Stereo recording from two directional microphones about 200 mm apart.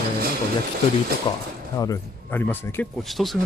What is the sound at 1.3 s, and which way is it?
Speech, 20° left (ahead or behind).